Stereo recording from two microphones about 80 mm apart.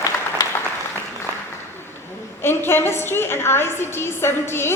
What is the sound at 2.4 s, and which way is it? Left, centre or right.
A woman's voice, left.